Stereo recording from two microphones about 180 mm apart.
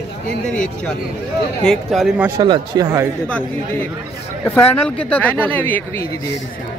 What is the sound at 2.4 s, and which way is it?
Speech, 20° right (ahead or behind).